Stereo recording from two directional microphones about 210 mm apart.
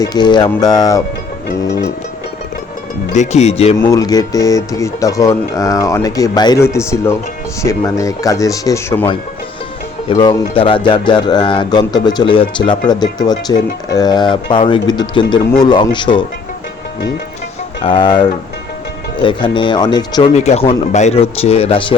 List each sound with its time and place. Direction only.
0.0 s speech: 20° left (ahead or behind)
3.1 s speech: 35° left (ahead or behind)
3.8 s speech: 15° left (ahead or behind)
10.1 s speech: 20° left (ahead or behind)
17.8 s speech: 20° left (ahead or behind)
20.3 s speech: 30° left (ahead or behind)